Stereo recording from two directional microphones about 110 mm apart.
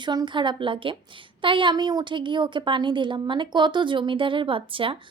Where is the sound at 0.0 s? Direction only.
40° right (ahead or behind).